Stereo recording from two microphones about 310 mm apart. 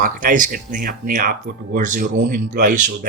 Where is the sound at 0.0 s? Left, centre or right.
Right.